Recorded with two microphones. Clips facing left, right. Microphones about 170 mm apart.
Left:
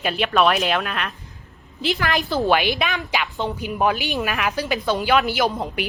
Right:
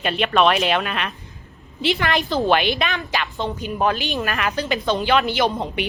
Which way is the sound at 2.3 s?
20° right (ahead or behind).